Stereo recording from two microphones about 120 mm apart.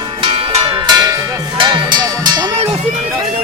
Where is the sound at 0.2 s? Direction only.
50° right (ahead or behind).